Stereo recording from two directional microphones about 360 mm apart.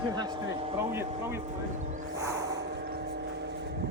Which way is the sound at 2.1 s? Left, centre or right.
Centre.